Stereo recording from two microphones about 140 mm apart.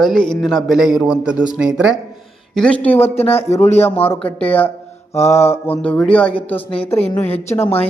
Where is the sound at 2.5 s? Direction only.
5° left (ahead or behind).